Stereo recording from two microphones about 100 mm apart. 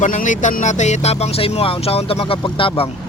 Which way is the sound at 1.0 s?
90° left.